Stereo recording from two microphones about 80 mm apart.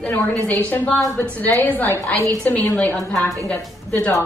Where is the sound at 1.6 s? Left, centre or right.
Left.